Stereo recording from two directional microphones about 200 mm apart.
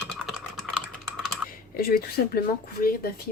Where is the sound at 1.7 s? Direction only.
50° left (ahead or behind).